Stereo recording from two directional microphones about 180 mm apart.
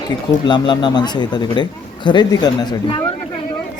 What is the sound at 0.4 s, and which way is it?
Speech, 25° left (ahead or behind).